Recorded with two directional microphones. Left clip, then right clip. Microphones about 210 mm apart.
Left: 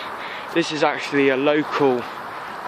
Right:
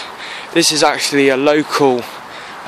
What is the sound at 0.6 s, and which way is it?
Speech, 40° right (ahead or behind).